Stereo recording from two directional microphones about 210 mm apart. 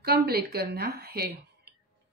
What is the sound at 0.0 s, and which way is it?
A woman's voice, 45° right (ahead or behind).